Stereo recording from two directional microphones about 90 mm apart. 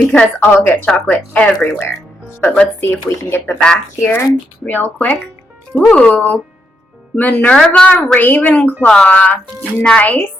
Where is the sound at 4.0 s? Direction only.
25° left (ahead or behind).